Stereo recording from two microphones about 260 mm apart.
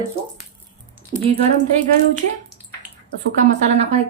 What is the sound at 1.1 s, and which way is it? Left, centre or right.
Speech, right.